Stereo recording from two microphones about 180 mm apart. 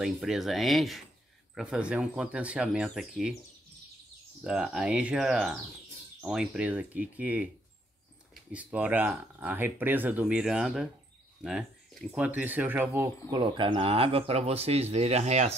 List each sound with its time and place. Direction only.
0.0 s speech: centre (ahead or behind)
4.4 s speech: 5° right (ahead or behind)
8.5 s speech: 5° right (ahead or behind)
13.3 s speech: 25° right (ahead or behind)